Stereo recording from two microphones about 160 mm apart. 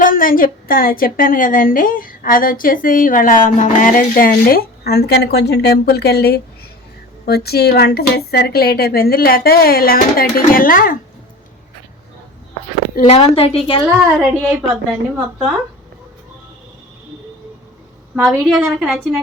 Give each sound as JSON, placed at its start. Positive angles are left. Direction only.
{"t": 0.0, "sound": "a woman's voice", "side_deg": 60}
{"t": 13.0, "sound": "a woman's voice", "side_deg": 40}
{"t": 14.0, "sound": "a woman's voice", "side_deg": -10}
{"t": 18.2, "sound": "a woman's voice", "side_deg": 0}